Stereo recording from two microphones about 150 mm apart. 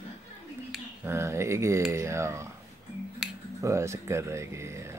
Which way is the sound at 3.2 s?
5° right (ahead or behind).